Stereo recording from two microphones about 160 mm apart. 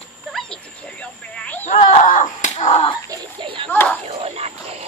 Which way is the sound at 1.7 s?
45° left (ahead or behind).